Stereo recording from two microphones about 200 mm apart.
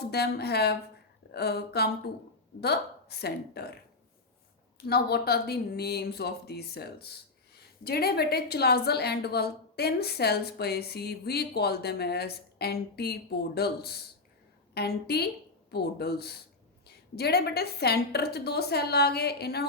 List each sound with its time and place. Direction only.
0.1 s a woman's voice: 55° left (ahead or behind)
4.9 s a woman's voice: 55° left (ahead or behind)